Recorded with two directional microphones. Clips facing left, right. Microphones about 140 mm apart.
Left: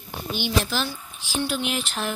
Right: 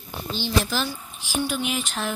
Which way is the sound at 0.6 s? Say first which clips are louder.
Right 1 dB; centre (ahead or behind).